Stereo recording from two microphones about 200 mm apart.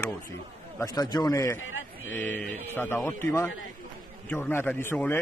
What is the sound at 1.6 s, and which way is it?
Speech, 75° left (ahead or behind).